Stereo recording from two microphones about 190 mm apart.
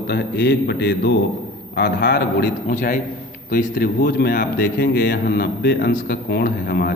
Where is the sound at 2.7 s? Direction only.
40° left (ahead or behind).